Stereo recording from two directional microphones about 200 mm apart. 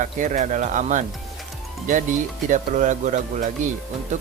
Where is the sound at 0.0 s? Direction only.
40° right (ahead or behind).